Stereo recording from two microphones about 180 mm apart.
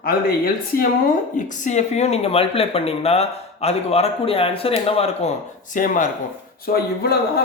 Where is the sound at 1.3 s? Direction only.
45° left (ahead or behind).